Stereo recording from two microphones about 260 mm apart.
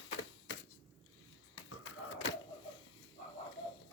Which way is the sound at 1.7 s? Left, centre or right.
Left.